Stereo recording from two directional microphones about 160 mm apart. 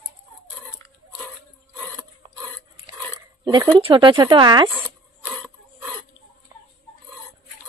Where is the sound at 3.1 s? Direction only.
25° right (ahead or behind).